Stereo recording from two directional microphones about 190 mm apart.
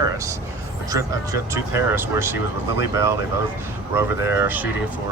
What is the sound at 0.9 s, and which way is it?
Speech, 15° right (ahead or behind).